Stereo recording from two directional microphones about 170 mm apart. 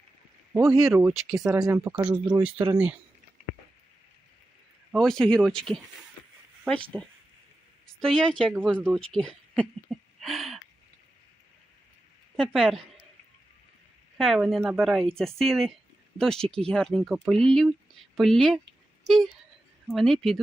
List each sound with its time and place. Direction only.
0.6 s speech: centre (ahead or behind)
1.5 s speech: 20° right (ahead or behind)
2.1 s speech: 5° right (ahead or behind)
3.4 s a sound: 55° right (ahead or behind)
4.9 s speech: 5° left (ahead or behind)
6.9 s speech: 10° left (ahead or behind)
12.4 s speech: centre (ahead or behind)
14.2 s speech: centre (ahead or behind)